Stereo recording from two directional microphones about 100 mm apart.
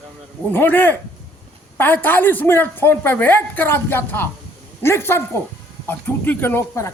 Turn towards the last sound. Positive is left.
turn(degrees=25)  # may be behind; listen again after turning